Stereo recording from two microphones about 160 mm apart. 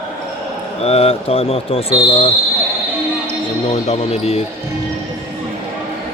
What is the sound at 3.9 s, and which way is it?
Speech, 40° left (ahead or behind).